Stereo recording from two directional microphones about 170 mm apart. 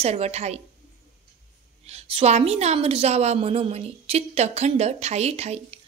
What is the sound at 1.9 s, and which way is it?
A woman's voice, 35° right (ahead or behind).